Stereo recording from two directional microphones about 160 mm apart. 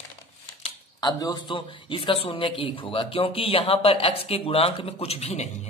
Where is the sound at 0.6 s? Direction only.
25° left (ahead or behind).